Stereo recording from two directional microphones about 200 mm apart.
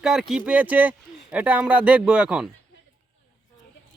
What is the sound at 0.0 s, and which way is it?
Speech, centre (ahead or behind).